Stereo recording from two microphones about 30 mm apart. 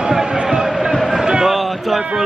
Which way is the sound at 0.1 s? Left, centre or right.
Centre.